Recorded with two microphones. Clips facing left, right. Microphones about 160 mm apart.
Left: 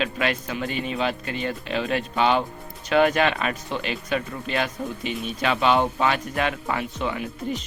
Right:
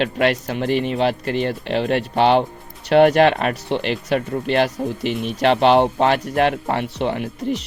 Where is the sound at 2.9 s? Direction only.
55° right (ahead or behind).